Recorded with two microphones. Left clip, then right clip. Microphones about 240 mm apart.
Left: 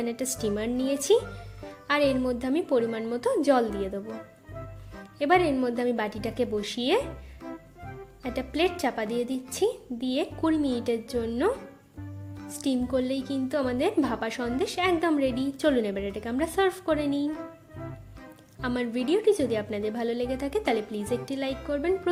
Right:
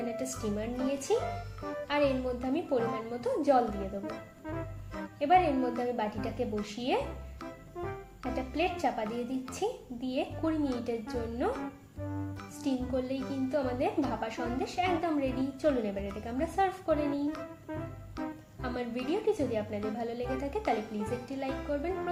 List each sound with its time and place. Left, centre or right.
0.0 s a woman's voice: left
1.9 s a woman's voice: left
5.2 s a woman's voice: left
8.3 s a woman's voice: left
12.6 s a woman's voice: left
18.6 s a woman's voice: left